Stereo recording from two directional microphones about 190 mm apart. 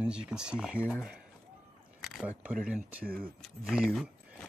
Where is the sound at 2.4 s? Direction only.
5° right (ahead or behind).